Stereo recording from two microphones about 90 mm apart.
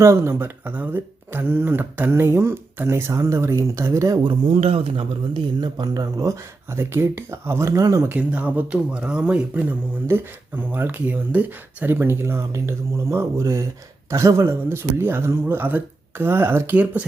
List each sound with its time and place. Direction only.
0.0 s speech: 30° right (ahead or behind)
4.2 s speech: 75° right (ahead or behind)
5.5 s speech: 55° right (ahead or behind)
6.7 s speech: 30° right (ahead or behind)
8.0 s speech: 20° right (ahead or behind)
16.7 s speech: 15° right (ahead or behind)